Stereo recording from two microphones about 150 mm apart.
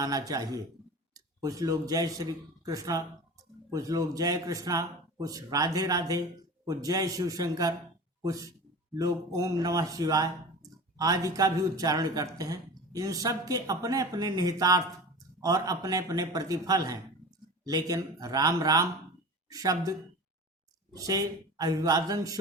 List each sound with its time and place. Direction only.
0.0 s a man's voice: 25° right (ahead or behind)